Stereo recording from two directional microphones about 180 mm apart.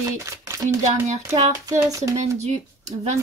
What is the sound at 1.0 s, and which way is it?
Speech, 40° right (ahead or behind).